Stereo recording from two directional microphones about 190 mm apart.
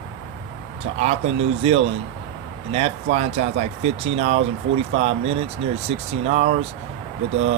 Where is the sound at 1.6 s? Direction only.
35° right (ahead or behind).